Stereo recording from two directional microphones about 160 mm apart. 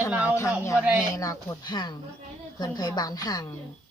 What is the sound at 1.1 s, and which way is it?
A woman's voice, 20° left (ahead or behind).